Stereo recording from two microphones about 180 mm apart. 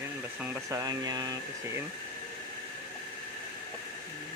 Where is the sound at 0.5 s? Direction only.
15° right (ahead or behind).